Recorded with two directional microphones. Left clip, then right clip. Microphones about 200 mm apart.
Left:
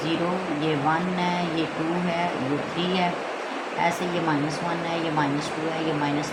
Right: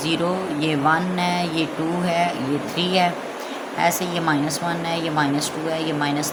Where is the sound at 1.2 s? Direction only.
50° right (ahead or behind).